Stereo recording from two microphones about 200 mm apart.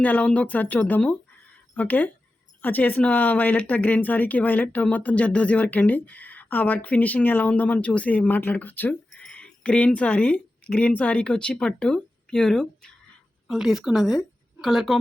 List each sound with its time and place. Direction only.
0.0 s speech: 5° left (ahead or behind)